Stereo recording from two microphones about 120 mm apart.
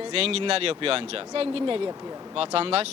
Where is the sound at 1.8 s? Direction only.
30° right (ahead or behind).